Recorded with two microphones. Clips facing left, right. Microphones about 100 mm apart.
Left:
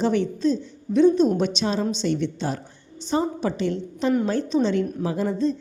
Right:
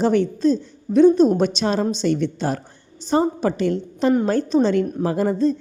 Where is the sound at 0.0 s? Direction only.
45° right (ahead or behind).